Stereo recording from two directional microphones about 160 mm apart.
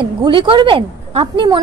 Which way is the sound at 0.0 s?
30° right (ahead or behind).